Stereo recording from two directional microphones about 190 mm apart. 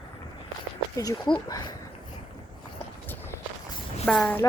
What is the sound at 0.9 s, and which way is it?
Speech, 20° left (ahead or behind).